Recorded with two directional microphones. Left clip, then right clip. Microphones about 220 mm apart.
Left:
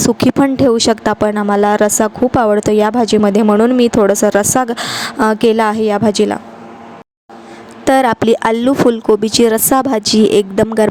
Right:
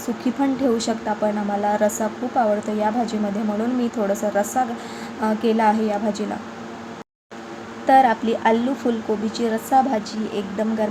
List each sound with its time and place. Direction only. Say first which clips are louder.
0.8 s speech: left 10 dB; 45° left (ahead or behind)
7.9 s speech: left 5 dB; 50° left (ahead or behind)